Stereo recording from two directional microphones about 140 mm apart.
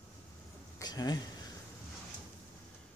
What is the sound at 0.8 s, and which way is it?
Speech, 30° left (ahead or behind).